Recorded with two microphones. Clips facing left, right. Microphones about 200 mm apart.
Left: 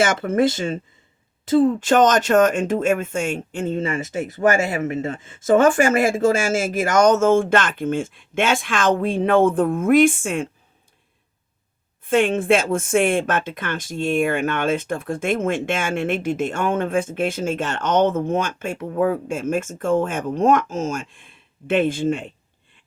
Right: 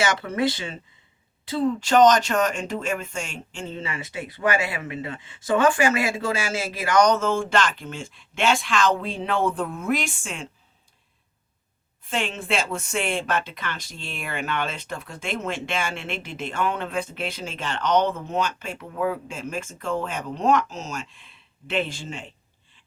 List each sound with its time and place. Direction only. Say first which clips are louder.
0.0 s speech: left 5 dB; 50° left (ahead or behind)
12.0 s speech: left 11 dB; 50° left (ahead or behind)